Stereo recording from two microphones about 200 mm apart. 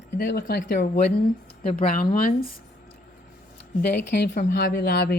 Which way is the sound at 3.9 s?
55° left (ahead or behind).